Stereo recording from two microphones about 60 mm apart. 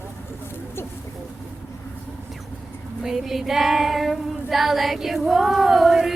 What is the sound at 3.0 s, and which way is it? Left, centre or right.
Child singing, centre.